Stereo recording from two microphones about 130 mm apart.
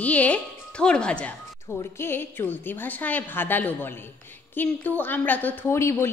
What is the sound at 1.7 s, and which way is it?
A woman's voice, 20° left (ahead or behind).